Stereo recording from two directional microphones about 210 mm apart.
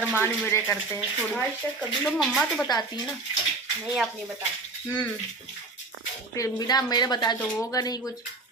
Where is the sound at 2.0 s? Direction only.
Centre (ahead or behind).